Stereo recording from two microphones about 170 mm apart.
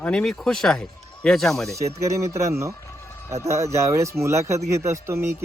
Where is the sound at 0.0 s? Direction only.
5° left (ahead or behind).